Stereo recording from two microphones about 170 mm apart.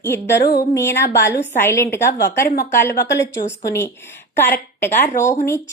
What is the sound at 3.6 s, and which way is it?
Speech, 15° left (ahead or behind).